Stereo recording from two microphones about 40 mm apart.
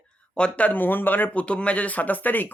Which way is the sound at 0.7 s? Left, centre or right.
Left.